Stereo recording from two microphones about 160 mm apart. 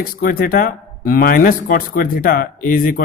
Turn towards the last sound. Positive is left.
turn(degrees=60)  # may be behind; listen again after turning